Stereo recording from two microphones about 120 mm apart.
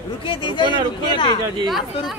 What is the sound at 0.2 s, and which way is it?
Speech, 45° left (ahead or behind).